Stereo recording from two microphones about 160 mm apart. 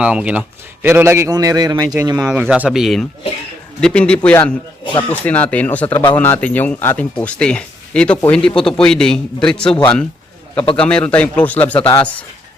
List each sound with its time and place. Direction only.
0.0 s a man's voice: 5° right (ahead or behind); by 1.9 s 25° right (ahead or behind)
2.2 s a man's voice: 5° right (ahead or behind)